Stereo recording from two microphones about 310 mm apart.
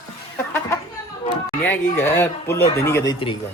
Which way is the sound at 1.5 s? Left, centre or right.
Centre.